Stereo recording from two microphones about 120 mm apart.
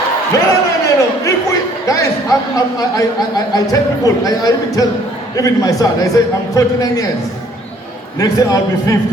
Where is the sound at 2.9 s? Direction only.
30° left (ahead or behind).